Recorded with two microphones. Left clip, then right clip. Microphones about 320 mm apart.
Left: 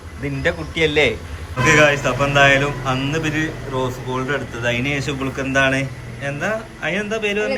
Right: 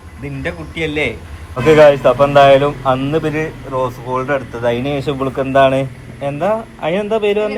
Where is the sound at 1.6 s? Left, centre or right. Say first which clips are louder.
Right 6 dB; centre.